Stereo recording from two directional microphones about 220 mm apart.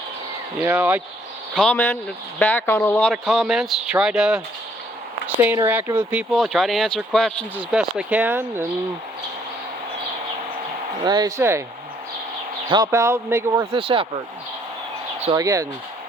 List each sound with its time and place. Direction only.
0.6 s speech: 10° right (ahead or behind)
1.5 s speech: 5° left (ahead or behind)
3.1 s speech: centre (ahead or behind)
5.4 s speech: 10° right (ahead or behind)
11.0 s speech: 20° right (ahead or behind)
12.7 s speech: 15° right (ahead or behind)
15.4 s speech: 15° right (ahead or behind)